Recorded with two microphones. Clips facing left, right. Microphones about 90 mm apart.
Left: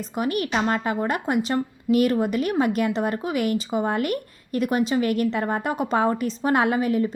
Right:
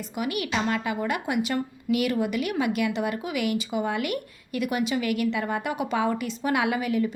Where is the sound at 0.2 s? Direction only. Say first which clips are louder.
Left 4 dB; 40° left (ahead or behind).